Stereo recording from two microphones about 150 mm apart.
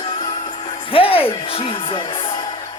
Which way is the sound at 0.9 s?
40° left (ahead or behind).